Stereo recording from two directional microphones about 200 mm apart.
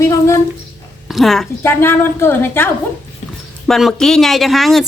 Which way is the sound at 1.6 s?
10° left (ahead or behind).